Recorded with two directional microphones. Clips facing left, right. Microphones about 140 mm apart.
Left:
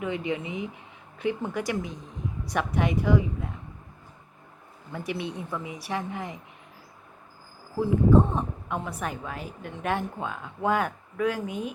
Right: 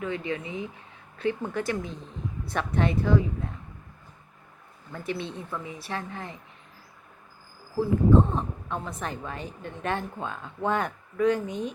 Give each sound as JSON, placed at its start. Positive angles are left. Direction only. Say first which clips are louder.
{"t": 0.0, "sound": "a woman's voice", "louder": "left 1 dB", "side_deg": 15}
{"t": 4.9, "sound": "a woman's voice", "louder": "left 1 dB", "side_deg": 10}
{"t": 8.1, "sound": "a woman's voice", "louder": "left 1 dB", "side_deg": 15}